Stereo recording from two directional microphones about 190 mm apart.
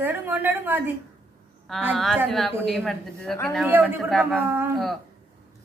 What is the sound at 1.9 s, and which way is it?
A woman's voice, 5° left (ahead or behind).